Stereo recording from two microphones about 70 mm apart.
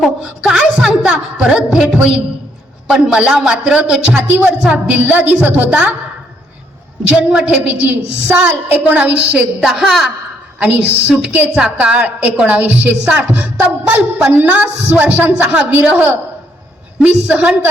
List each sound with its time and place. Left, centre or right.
0.2 s a woman's voice: centre
5.0 s music: right
7.2 s music: centre
9.6 s a woman's voice: centre
10.6 s music: right
11.5 s a woman's voice: centre
12.5 s music: right